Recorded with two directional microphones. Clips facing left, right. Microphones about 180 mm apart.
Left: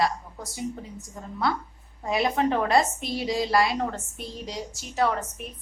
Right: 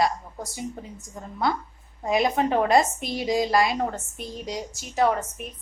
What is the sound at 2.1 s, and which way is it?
A woman's voice, 15° right (ahead or behind).